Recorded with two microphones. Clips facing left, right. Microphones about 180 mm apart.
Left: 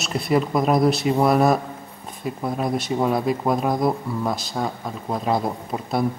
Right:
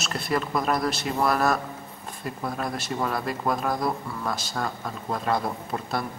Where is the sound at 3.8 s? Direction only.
25° left (ahead or behind).